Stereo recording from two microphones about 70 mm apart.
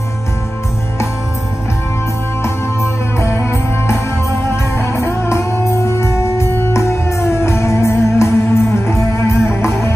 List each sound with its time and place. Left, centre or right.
2.4 s music: left